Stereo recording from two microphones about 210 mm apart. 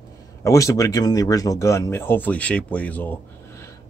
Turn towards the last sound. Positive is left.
turn(degrees=10)  # may be behind; listen again after turning